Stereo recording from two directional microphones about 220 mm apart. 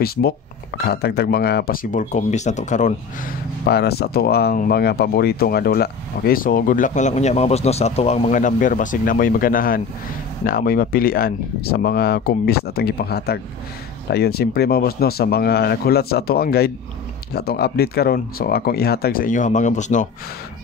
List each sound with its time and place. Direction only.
0.0 s speech: 45° left (ahead or behind)